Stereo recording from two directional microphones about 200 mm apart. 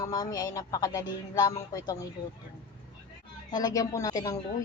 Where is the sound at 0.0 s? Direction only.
20° left (ahead or behind).